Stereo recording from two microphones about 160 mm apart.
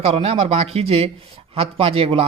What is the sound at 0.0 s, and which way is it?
Speech, 40° right (ahead or behind).